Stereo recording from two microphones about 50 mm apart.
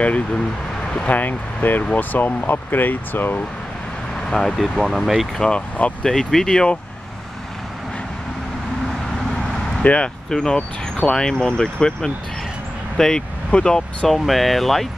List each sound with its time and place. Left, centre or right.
0.0 s speech: left
4.3 s speech: centre
4.8 s speech: centre
6.0 s speech: centre
9.8 s speech: left
14.0 s speech: centre